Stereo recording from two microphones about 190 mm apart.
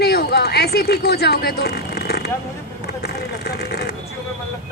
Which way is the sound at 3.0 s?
55° left (ahead or behind).